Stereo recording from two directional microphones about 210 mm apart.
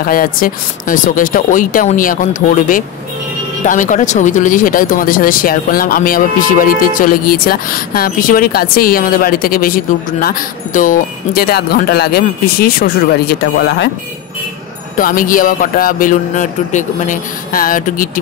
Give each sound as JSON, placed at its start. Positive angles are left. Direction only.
{"t": 0.0, "sound": "speech", "side_deg": 45}
{"t": 3.6, "sound": "speech", "side_deg": 40}
{"t": 15.0, "sound": "speech", "side_deg": 40}